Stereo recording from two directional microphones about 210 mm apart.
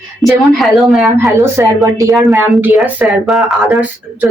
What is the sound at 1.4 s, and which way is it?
Speech, 15° right (ahead or behind).